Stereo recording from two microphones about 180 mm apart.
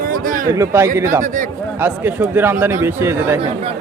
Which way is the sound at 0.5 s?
15° right (ahead or behind).